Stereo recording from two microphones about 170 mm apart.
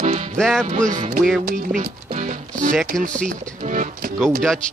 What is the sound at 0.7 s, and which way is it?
Speech, 45° right (ahead or behind).